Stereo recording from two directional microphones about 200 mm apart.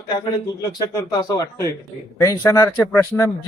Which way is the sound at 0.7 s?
20° left (ahead or behind).